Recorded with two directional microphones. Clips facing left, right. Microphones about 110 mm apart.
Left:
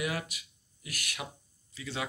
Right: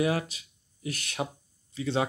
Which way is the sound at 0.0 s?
30° right (ahead or behind).